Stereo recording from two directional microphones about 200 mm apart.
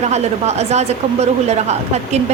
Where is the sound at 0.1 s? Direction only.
35° right (ahead or behind).